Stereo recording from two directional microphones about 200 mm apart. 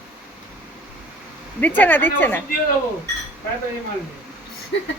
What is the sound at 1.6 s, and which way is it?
Speech, 10° left (ahead or behind).